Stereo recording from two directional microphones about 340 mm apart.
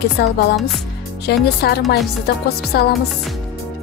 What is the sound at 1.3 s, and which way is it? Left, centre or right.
Speech, left.